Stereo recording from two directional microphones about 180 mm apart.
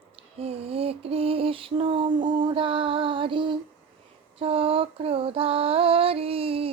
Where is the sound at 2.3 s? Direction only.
30° right (ahead or behind).